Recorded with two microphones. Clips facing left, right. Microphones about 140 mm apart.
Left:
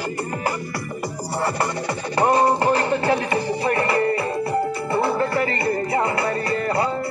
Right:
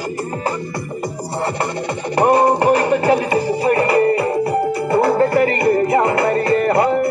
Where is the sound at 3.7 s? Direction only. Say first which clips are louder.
Right 6 dB; 40° right (ahead or behind).